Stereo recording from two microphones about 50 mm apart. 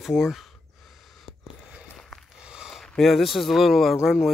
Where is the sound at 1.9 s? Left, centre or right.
Centre.